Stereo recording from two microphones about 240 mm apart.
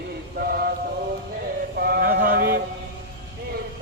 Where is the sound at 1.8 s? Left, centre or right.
Right.